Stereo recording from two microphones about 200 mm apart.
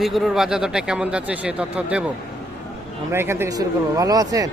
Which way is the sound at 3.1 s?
10° right (ahead or behind).